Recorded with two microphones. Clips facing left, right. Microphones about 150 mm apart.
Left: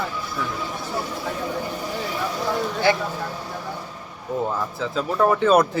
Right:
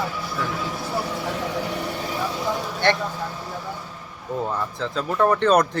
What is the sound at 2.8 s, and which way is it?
Speech, 5° left (ahead or behind).